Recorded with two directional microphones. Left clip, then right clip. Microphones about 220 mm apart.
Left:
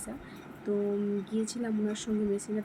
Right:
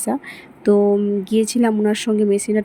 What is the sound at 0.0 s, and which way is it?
Speech, 40° right (ahead or behind).